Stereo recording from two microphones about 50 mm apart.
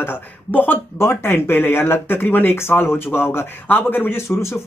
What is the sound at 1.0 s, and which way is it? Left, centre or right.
Speech, left.